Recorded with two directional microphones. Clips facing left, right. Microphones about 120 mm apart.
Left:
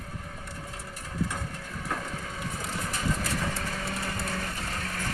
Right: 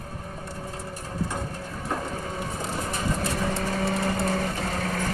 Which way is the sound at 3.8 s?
30° right (ahead or behind).